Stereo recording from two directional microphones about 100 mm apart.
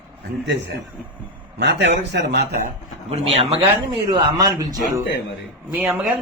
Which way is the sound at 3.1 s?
90° right.